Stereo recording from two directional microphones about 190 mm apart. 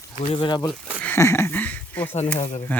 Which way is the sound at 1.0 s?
15° left (ahead or behind).